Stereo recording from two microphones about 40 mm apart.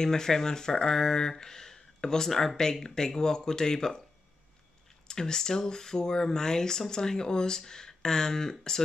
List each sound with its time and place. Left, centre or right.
0.0 s speech: centre
5.0 s speech: centre